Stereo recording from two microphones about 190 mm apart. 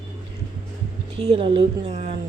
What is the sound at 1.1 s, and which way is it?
Speech, 30° right (ahead or behind).